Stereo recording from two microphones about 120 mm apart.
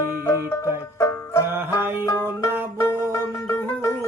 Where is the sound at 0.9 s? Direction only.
25° left (ahead or behind).